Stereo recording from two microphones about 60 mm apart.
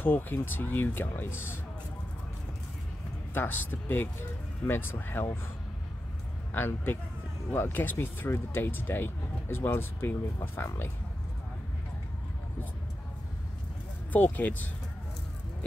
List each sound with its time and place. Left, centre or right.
0.0 s speech: left
3.3 s speech: left
6.5 s speech: left
14.1 s speech: left